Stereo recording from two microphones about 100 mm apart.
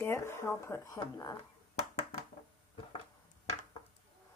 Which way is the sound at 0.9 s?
40° left (ahead or behind).